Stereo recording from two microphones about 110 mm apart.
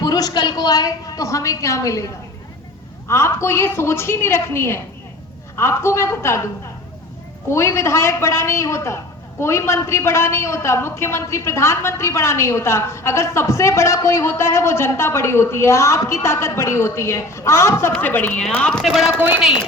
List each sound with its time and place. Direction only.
0.0 s a woman's voice: 35° left (ahead or behind)
3.1 s a woman's voice: 25° left (ahead or behind)
7.4 s a woman's voice: 25° left (ahead or behind); by 19.1 s centre (ahead or behind)